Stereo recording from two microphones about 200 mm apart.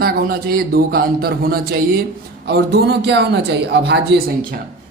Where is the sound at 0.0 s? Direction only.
50° right (ahead or behind).